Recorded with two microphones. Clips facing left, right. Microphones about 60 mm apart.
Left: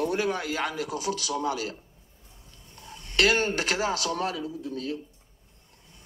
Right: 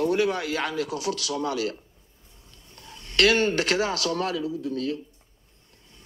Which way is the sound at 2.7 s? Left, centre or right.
Centre.